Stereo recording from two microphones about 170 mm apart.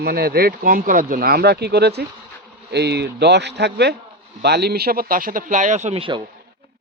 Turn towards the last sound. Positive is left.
turn(degrees=-30)  # may be behind; listen again after turning